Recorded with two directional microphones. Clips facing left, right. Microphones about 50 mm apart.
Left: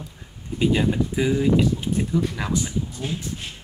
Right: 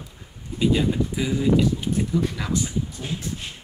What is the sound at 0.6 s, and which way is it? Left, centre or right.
Speech, left.